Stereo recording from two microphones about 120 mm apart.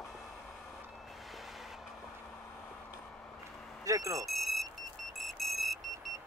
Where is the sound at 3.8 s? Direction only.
25° right (ahead or behind).